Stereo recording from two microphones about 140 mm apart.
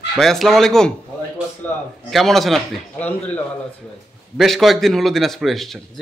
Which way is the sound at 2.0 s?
Centre (ahead or behind).